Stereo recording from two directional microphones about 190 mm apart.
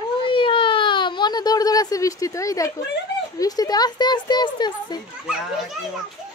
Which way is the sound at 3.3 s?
20° left (ahead or behind).